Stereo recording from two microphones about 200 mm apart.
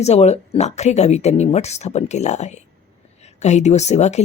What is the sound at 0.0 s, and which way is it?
Speech, 35° left (ahead or behind).